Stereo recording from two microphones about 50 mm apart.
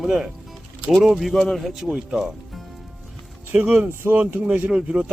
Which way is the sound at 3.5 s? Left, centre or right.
Right.